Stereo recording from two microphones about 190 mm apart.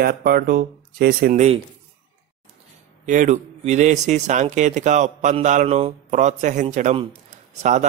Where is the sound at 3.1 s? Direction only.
40° right (ahead or behind).